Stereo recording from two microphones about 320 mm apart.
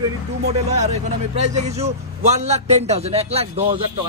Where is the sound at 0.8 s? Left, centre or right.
Right.